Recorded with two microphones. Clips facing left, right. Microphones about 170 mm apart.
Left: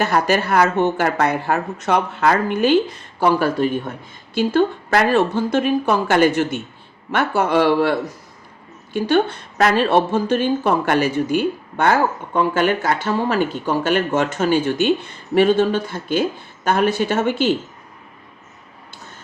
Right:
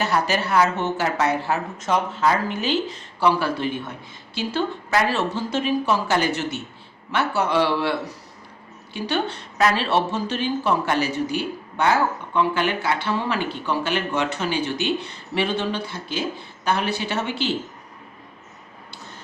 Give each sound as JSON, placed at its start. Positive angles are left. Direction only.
{"t": 0.0, "sound": "speech", "side_deg": 55}
{"t": 4.4, "sound": "a woman's voice", "side_deg": 55}